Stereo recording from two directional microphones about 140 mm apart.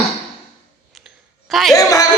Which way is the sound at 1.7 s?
25° left (ahead or behind).